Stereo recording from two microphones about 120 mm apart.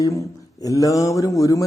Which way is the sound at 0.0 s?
30° left (ahead or behind).